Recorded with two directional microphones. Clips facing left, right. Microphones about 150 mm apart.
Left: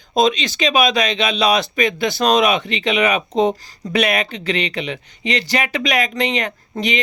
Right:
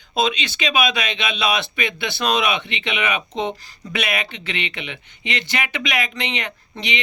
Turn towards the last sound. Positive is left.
turn(degrees=45)  # may be behind; listen again after turning